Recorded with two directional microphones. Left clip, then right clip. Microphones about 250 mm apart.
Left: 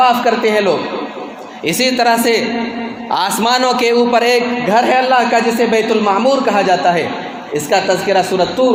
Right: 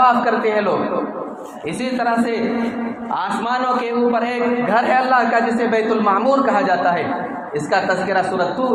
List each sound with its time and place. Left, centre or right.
0.0 s a man's voice: left
1.6 s a man's voice: left